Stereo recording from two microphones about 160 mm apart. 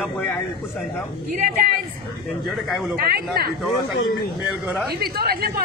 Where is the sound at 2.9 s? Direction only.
75° right (ahead or behind).